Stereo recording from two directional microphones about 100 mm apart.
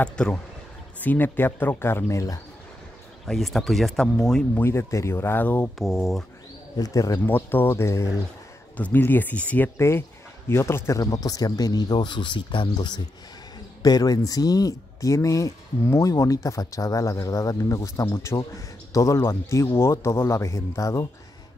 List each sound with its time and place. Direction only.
0.0 s speech: 10° left (ahead or behind)
1.0 s speech: 20° left (ahead or behind)
3.3 s speech: centre (ahead or behind)
4.6 s speech: 25° left (ahead or behind)
5.8 s speech: centre (ahead or behind)
6.8 s speech: 35° left (ahead or behind)
7.2 s speech: 20° left (ahead or behind)
8.7 s speech: 15° left (ahead or behind)
9.8 s speech: 25° left (ahead or behind)